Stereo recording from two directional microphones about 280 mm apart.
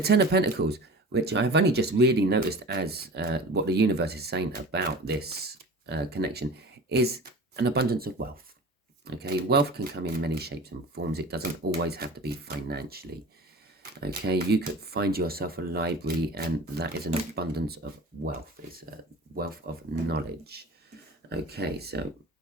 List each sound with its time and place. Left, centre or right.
0.0 s speech: right